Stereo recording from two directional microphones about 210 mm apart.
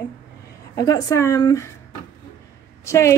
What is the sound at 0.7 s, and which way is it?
Speech, 15° left (ahead or behind).